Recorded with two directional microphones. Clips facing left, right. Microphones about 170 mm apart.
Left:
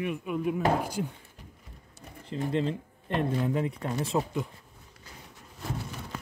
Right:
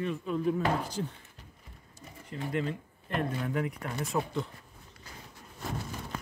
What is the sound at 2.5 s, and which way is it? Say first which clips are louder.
Speech: left 2 dB; 25° left (ahead or behind).